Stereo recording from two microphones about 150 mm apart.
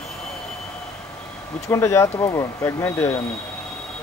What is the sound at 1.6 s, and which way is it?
Speech, 20° left (ahead or behind).